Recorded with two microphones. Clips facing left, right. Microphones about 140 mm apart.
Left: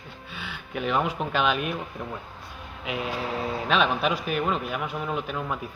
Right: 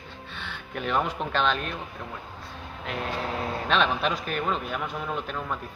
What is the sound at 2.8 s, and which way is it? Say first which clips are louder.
A man's voice: left 1 dB; 5° left (ahead or behind).